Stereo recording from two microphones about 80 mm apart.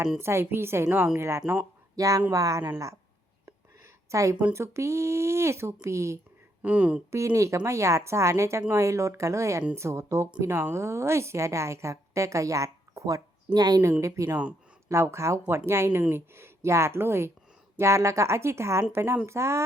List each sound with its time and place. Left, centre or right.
0.2 s a woman's voice: right
1.5 s speech: centre
2.0 s a woman's voice: right
4.1 s a woman's voice: right
6.6 s speech: centre
7.1 s a woman's voice: right
14.3 s speech: centre
14.8 s a woman's voice: right